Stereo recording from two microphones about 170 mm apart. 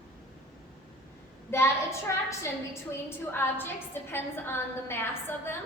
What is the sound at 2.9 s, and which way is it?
A woman's voice, 10° left (ahead or behind).